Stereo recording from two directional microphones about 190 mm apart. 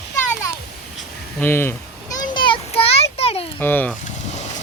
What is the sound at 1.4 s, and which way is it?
Speech, 10° left (ahead or behind).